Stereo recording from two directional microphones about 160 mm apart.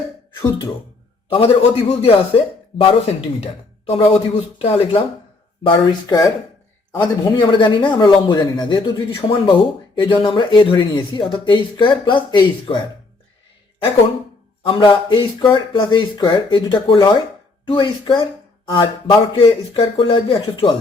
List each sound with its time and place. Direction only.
1.3 s a man's voice: 35° left (ahead or behind)
5.6 s a man's voice: 25° left (ahead or behind)
14.7 s a man's voice: 30° left (ahead or behind)